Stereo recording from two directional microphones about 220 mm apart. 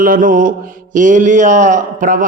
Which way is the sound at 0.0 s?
40° right (ahead or behind).